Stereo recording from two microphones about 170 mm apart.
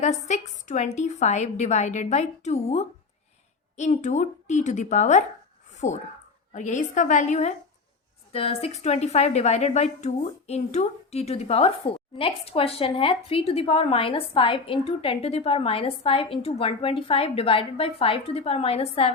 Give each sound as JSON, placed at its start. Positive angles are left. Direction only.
{"t": 0.0, "sound": "a woman's voice", "side_deg": 45}
{"t": 5.7, "sound": "a sound", "side_deg": 45}
{"t": 6.5, "sound": "a woman's voice", "side_deg": 45}